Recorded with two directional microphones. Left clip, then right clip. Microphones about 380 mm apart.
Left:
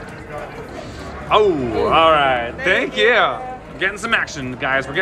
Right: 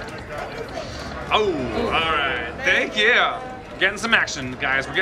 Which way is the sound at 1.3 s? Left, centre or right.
Centre.